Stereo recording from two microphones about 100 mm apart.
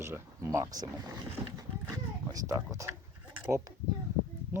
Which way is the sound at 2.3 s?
30° right (ahead or behind).